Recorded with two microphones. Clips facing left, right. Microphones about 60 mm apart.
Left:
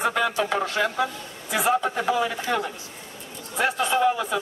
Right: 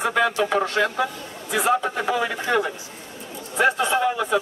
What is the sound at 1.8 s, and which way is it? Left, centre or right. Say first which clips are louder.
A man's voice: even; centre.